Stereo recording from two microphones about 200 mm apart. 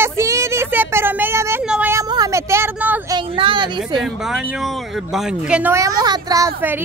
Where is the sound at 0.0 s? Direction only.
15° right (ahead or behind).